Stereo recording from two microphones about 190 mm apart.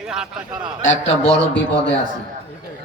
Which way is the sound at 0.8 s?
90° left.